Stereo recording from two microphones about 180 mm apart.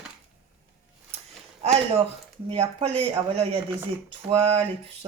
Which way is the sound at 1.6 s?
35° right (ahead or behind).